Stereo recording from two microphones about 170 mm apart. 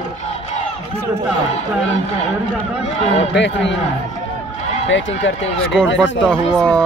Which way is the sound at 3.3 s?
90° left.